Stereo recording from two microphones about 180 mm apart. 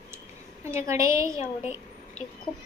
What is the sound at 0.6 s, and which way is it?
A woman's voice, 15° right (ahead or behind).